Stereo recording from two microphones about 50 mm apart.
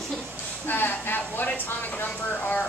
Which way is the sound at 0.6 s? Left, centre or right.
Left.